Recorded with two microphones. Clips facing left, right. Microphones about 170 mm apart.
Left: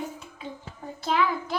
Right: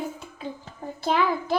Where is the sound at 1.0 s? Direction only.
40° right (ahead or behind).